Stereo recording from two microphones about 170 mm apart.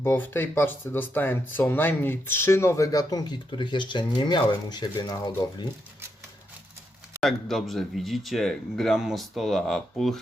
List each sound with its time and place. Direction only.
0.0 s speech: 15° left (ahead or behind)
7.2 s a man's voice: centre (ahead or behind)